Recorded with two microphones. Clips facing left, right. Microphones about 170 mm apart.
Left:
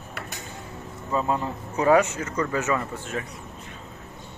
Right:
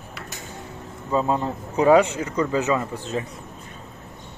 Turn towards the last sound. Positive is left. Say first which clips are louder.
# right 3 dB
turn(degrees=-25)  # may be behind; listen again after turning